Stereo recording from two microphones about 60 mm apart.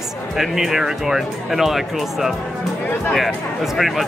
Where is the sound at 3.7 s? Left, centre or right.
Centre.